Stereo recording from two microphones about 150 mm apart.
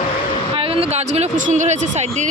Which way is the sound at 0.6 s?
40° right (ahead or behind).